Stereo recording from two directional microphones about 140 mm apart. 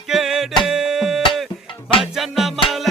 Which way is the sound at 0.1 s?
Centre (ahead or behind).